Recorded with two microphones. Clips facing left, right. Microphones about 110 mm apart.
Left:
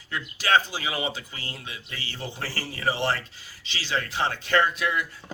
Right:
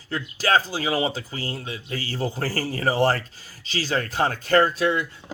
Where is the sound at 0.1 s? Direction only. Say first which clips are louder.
Right 2 dB; 35° right (ahead or behind).